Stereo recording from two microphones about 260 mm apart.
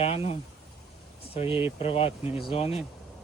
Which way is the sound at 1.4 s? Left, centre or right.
Centre.